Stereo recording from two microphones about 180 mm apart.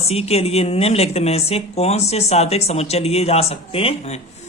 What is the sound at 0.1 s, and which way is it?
A woman's voice, 35° left (ahead or behind).